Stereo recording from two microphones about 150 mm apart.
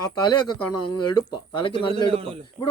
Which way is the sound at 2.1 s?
40° right (ahead or behind).